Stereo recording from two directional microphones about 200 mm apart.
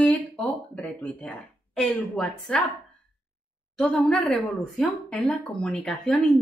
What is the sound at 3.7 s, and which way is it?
Speech, 5° left (ahead or behind).